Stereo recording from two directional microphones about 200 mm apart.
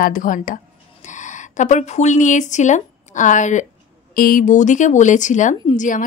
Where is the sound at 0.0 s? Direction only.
40° left (ahead or behind).